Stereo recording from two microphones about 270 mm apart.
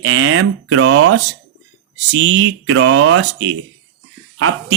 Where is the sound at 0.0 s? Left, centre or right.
Right.